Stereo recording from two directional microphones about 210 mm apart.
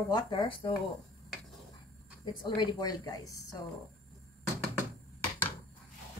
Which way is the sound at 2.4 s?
20° left (ahead or behind).